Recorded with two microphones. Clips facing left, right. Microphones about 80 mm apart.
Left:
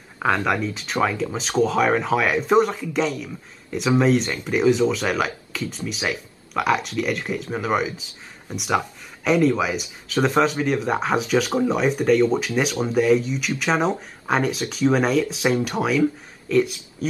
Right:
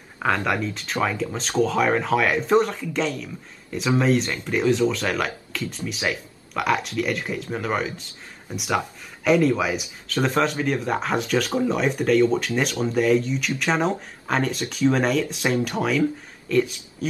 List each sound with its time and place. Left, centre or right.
0.2 s speech: centre